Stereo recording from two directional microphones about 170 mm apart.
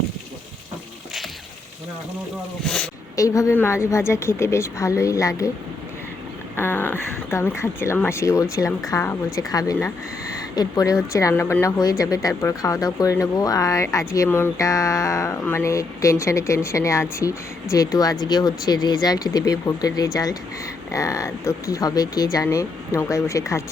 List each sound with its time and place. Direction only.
2.6 s speech: 5° left (ahead or behind)
3.2 s a woman's voice: 20° left (ahead or behind)
6.6 s a woman's voice: 10° left (ahead or behind)